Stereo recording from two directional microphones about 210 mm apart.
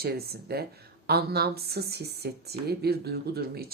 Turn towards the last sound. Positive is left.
turn(degrees=-50)  # may be behind; listen again after turning